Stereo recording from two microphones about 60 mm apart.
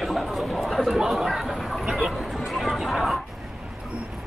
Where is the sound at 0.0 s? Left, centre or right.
Centre.